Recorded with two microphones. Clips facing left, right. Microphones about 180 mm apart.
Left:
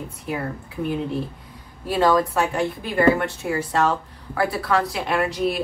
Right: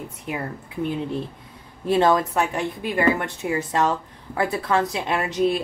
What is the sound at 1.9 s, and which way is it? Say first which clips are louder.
Speech: even; 25° right (ahead or behind).